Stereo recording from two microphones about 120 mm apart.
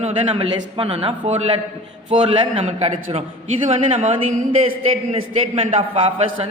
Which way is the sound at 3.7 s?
75° right (ahead or behind).